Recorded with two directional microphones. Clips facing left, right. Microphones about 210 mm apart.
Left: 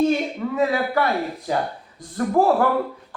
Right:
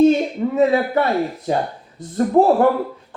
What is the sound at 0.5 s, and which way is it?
Speech, 20° right (ahead or behind).